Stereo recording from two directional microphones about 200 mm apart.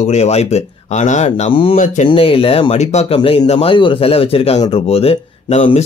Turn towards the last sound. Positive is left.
turn(degrees=30)  # may be behind; listen again after turning